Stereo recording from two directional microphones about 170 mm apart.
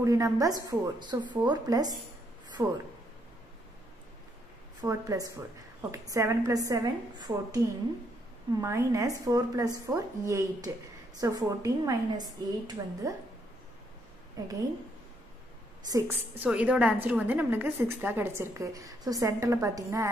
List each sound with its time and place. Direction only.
0.0 s a woman's voice: 20° right (ahead or behind)
4.8 s speech: 20° right (ahead or behind)
15.9 s a woman's voice: 10° right (ahead or behind)